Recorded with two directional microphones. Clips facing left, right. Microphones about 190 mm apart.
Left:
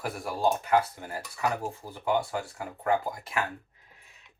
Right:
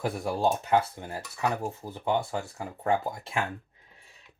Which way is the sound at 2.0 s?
25° right (ahead or behind).